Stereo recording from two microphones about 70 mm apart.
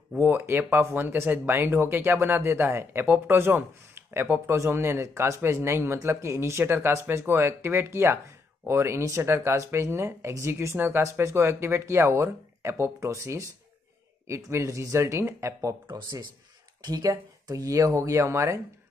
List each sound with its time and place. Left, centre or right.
0.2 s speech: right
15.9 s speech: right
17.0 s speech: right